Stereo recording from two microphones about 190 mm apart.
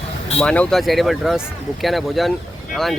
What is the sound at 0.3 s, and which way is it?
Speech, 5° left (ahead or behind).